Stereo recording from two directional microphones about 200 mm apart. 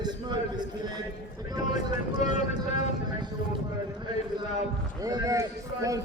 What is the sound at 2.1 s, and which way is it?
Vehicle, 35° left (ahead or behind).